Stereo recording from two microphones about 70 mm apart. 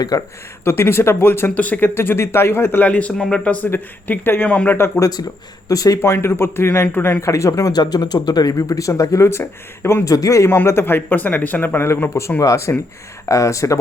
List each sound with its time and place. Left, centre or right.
0.0 s speech: left
0.6 s speech: left
1.5 s speech: left
2.0 s speech: left
4.9 s speech: left
6.2 s speech: left
7.2 s speech: left
10.1 s a man's voice: left
10.6 s speech: left
12.4 s a man's voice: left